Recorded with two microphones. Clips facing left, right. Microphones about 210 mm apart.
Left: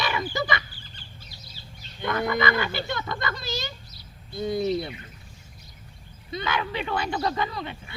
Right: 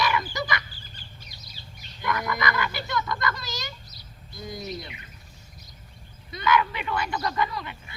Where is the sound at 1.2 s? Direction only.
15° right (ahead or behind).